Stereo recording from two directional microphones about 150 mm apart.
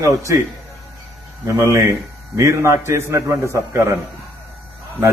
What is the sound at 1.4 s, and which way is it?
A man's voice, 20° right (ahead or behind).